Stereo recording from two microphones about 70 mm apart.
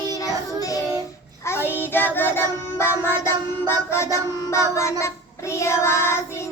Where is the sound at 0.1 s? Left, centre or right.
Left.